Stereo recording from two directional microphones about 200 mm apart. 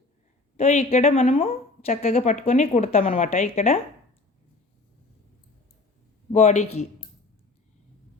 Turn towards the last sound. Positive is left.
turn(degrees=35)  # may be behind; listen again after turning